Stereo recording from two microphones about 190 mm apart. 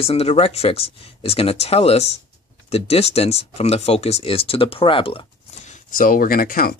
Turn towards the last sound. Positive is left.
turn(degrees=50)  # may be behind; listen again after turning